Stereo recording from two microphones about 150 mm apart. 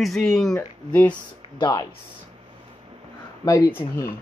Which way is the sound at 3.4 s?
25° left (ahead or behind).